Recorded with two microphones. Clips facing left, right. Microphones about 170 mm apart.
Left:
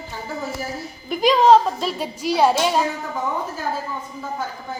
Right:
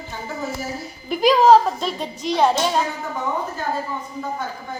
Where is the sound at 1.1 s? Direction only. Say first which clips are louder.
Right 1 dB; centre (ahead or behind).